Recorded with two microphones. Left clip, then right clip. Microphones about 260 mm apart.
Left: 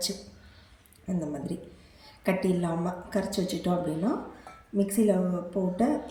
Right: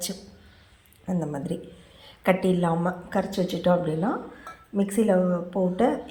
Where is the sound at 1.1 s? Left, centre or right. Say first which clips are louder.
Right 3 dB; centre.